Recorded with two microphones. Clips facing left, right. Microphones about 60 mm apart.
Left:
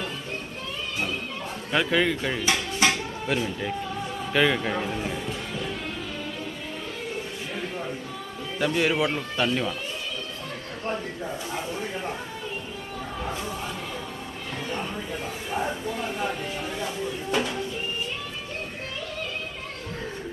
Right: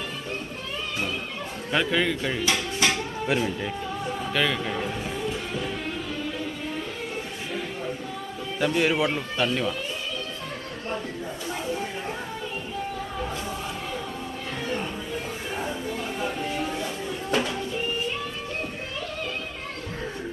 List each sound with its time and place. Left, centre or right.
1.7 s a man's voice: centre
2.4 s a sound: centre
3.2 s speech: centre
4.3 s a man's voice: centre
8.5 s a man's voice: centre